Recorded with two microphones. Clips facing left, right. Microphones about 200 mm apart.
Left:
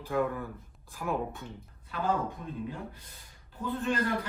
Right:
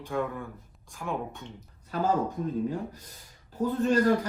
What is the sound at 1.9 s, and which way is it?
Speech, 40° right (ahead or behind).